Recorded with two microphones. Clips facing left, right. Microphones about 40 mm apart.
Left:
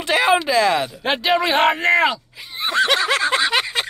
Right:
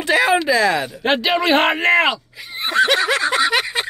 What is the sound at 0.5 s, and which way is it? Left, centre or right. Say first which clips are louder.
Speech: right 1 dB; left.